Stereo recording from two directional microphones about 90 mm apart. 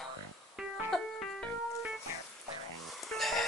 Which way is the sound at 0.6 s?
5° right (ahead or behind).